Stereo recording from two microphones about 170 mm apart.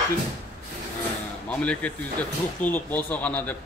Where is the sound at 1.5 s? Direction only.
5° left (ahead or behind).